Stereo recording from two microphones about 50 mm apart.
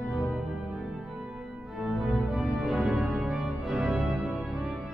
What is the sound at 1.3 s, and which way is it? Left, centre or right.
Organ, centre.